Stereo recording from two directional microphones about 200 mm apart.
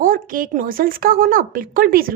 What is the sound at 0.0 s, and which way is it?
Speech, 45° right (ahead or behind).